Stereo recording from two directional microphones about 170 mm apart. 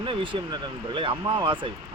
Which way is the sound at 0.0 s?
30° right (ahead or behind).